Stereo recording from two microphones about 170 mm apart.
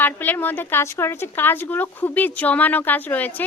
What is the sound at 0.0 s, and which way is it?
Speech, 10° left (ahead or behind).